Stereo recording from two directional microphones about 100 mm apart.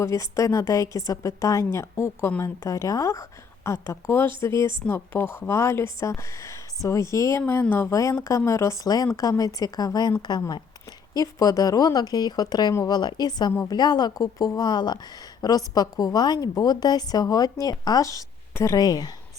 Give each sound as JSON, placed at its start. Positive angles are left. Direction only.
{"t": 0.0, "sound": "a woman's voice", "side_deg": 30}
{"t": 7.9, "sound": "a woman's voice", "side_deg": 30}
{"t": 13.5, "sound": "speech", "side_deg": 30}
{"t": 13.7, "sound": "a woman's voice", "side_deg": 45}